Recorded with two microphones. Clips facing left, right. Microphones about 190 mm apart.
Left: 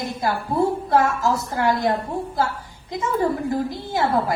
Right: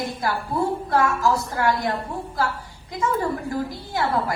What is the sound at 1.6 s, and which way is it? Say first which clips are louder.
Speech: left 2 dB; 20° left (ahead or behind).